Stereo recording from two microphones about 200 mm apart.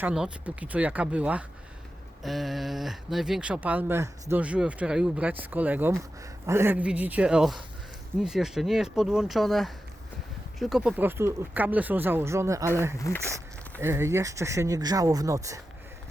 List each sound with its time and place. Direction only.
0.0 s speech: 5° right (ahead or behind)